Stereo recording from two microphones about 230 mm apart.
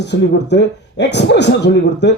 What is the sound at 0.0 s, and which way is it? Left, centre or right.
Speech, left.